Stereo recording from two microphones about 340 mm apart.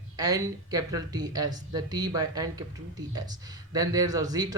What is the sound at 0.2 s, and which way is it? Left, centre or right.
Speech, centre.